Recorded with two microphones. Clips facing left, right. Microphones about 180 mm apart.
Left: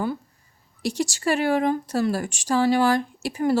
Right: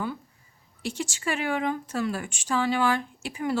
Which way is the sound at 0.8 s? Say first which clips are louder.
Left 6 dB; 40° left (ahead or behind).